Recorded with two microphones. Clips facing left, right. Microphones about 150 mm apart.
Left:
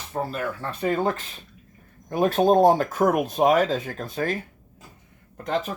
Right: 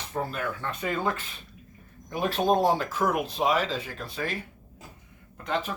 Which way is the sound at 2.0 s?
50° left (ahead or behind).